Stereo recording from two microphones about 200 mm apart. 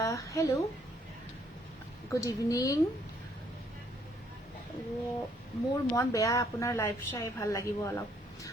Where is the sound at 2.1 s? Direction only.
15° left (ahead or behind).